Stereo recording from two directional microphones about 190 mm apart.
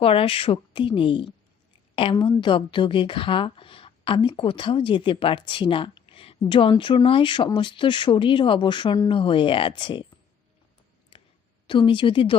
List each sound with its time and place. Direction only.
0.0 s a woman's voice: 30° left (ahead or behind)
11.1 s a sound: 30° left (ahead or behind)
11.6 s a woman's voice: 25° left (ahead or behind)